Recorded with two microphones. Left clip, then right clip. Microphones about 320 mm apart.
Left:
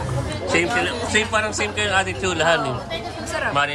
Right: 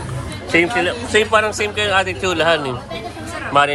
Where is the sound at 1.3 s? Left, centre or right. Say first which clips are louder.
Right 5 dB; centre.